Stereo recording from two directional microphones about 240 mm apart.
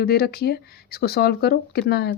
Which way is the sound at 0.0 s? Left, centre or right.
Left.